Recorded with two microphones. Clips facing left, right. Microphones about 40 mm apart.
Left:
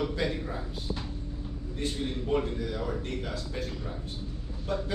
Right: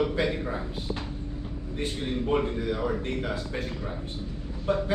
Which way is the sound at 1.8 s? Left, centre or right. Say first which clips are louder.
Right 3 dB; right.